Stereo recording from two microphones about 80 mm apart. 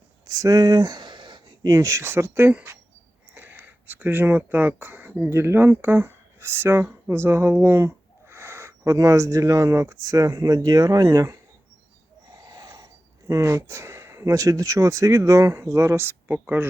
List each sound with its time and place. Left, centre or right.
0.3 s a sound: right
1.6 s speech: right
5.3 s speech: right
12.5 s speech: right